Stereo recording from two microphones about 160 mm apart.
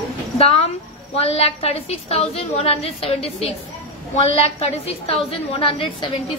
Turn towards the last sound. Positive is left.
turn(degrees=30)  # may be behind; listen again after turning